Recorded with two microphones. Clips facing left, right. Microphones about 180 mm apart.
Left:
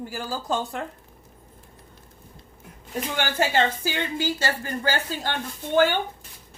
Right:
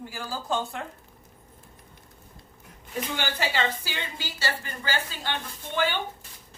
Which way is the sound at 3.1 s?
50° left (ahead or behind).